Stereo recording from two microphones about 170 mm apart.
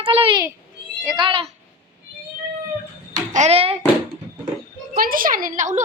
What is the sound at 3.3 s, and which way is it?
Speech, 40° right (ahead or behind).